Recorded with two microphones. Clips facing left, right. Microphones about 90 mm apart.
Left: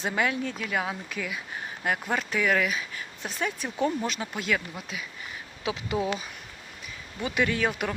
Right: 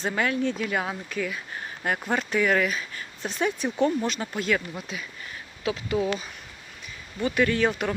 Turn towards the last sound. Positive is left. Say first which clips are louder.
# right 3 dB
turn(degrees=10)  # may be behind; listen again after turning